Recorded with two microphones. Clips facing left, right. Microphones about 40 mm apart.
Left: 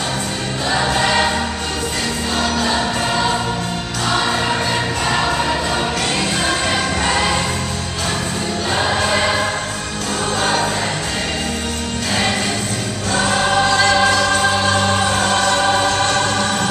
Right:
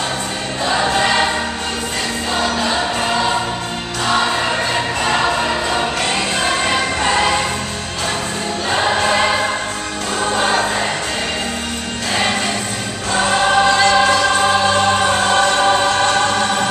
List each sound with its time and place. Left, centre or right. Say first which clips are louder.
0.7 s choir: right 1 dB; centre
2.3 s choir: right 1 dB; centre
4.1 s music: right 1 dB; centre
8.7 s choir: right 2 dB; centre
10.3 s music: right 2 dB; centre
13.1 s choir: right 2 dB; centre